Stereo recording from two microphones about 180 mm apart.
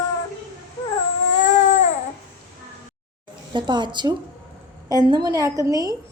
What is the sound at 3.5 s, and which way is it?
A woman's voice, 25° right (ahead or behind).